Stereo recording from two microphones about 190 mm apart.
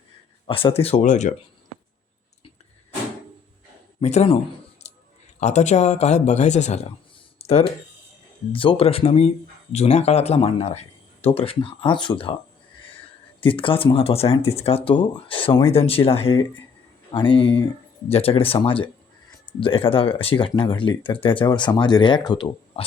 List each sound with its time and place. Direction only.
0.4 s speech: 30° left (ahead or behind)
4.0 s speech: 35° left (ahead or behind)
4.8 s a sound: 35° left (ahead or behind)
5.4 s speech: 35° left (ahead or behind)
7.3 s a sound: 30° left (ahead or behind)
8.5 s speech: 30° left (ahead or behind)
13.4 s speech: 25° left (ahead or behind)